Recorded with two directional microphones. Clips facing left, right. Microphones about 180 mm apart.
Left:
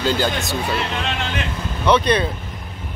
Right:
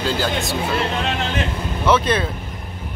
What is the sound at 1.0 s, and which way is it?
Speech, 40° right (ahead or behind).